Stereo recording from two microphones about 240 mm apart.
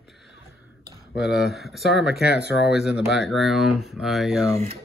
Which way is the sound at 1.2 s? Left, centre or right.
Centre.